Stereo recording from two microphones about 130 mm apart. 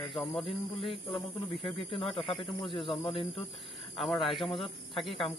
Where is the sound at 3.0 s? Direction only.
40° left (ahead or behind).